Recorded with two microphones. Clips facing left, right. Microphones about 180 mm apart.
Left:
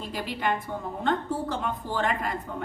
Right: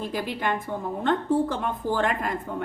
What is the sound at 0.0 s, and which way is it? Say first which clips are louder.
A woman's voice: right 2 dB; 50° right (ahead or behind).